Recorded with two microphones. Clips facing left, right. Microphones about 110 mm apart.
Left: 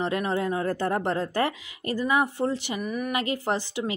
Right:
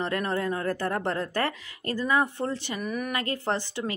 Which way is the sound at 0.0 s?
15° left (ahead or behind).